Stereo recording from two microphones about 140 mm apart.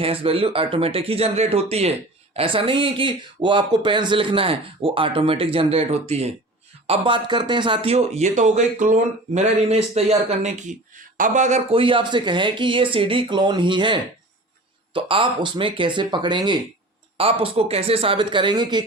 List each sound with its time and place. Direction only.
0.0 s speech: 40° right (ahead or behind); by 11.6 s 60° right (ahead or behind)
11.7 s speech: 40° right (ahead or behind)